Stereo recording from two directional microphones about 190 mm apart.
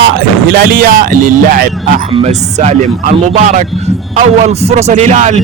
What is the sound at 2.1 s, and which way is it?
Speech, 35° right (ahead or behind).